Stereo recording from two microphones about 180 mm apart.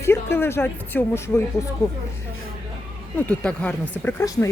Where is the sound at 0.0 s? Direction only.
15° left (ahead or behind).